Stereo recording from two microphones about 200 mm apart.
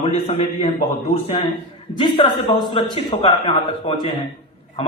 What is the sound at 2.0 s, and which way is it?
A man's voice, 25° left (ahead or behind).